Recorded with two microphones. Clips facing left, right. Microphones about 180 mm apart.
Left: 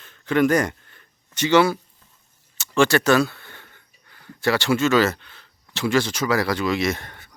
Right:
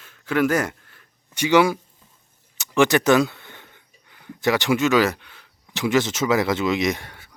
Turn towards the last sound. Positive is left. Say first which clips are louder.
# right 1 dB
turn(degrees=-10)  # may be behind; listen again after turning